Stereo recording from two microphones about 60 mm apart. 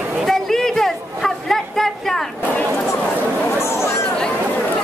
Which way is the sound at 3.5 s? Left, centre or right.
Left.